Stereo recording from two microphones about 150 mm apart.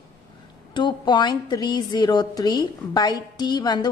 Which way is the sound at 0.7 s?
30° left (ahead or behind).